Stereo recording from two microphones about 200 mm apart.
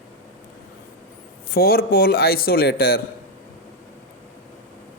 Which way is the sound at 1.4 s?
50° left (ahead or behind).